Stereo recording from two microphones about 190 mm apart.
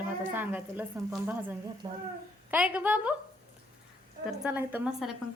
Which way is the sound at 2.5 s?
5° right (ahead or behind).